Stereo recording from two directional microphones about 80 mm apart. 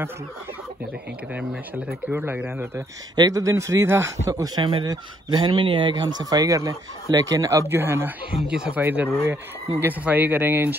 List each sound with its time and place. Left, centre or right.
1.3 s speech: centre
2.1 s speech: centre
3.2 s speech: right
4.8 s speech: right
7.6 s speech: right
8.4 s speech: centre
8.8 s speech: right